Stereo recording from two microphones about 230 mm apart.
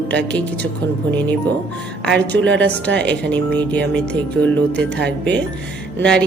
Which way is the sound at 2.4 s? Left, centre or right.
Right.